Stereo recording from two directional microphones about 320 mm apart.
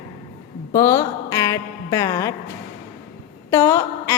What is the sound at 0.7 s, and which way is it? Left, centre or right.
A woman's voice, centre.